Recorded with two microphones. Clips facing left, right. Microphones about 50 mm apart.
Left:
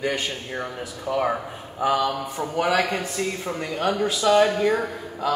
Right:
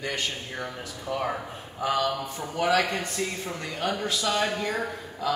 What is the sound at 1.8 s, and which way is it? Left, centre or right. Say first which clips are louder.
Speech: left 4 dB; centre.